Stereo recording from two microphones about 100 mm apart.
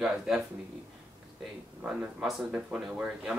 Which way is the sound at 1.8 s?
5° right (ahead or behind).